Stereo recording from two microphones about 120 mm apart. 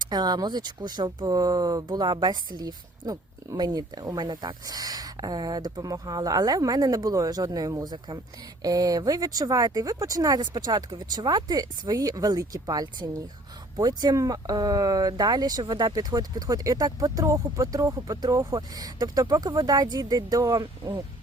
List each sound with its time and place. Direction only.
0.0 s speech: 35° right (ahead or behind)